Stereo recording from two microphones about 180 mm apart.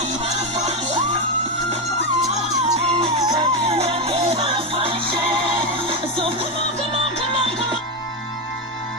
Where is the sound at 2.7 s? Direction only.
35° right (ahead or behind).